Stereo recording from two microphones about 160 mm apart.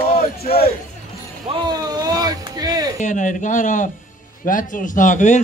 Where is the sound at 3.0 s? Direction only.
50° left (ahead or behind).